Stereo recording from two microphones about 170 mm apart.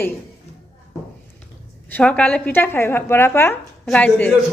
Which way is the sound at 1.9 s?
5° left (ahead or behind).